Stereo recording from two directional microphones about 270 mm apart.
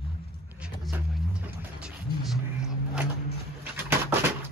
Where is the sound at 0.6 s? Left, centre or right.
Centre.